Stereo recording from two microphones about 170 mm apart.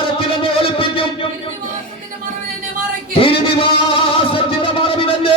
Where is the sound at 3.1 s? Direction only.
35° left (ahead or behind).